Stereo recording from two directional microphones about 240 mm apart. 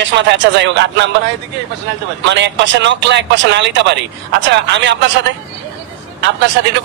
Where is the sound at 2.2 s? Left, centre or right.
Right.